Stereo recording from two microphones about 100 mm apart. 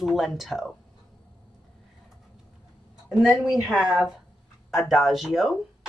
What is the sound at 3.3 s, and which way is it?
Speech, 35° left (ahead or behind).